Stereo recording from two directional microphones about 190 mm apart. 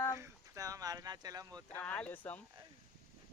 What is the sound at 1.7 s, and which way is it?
Speech, 10° left (ahead or behind).